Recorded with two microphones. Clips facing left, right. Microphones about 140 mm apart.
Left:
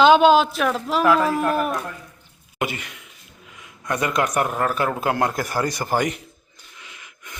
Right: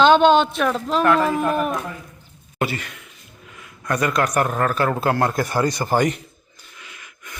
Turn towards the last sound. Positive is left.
turn(degrees=20)  # may be behind; listen again after turning